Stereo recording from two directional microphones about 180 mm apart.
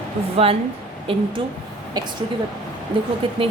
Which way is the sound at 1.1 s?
30° right (ahead or behind).